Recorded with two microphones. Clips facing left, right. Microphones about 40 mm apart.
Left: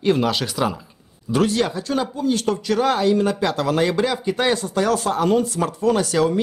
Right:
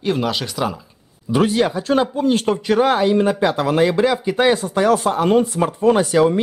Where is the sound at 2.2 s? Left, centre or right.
Right.